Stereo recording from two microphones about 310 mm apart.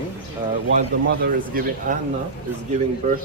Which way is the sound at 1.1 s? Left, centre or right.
Right.